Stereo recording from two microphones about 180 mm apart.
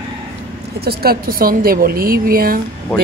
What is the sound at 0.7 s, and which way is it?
A woman's voice, 60° right (ahead or behind).